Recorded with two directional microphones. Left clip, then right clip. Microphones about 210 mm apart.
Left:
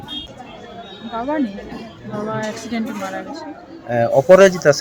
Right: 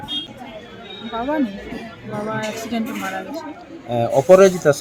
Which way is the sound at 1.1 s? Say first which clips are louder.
Even; 5° left (ahead or behind).